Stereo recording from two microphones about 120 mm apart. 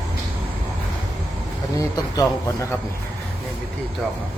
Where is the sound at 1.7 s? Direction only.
30° left (ahead or behind).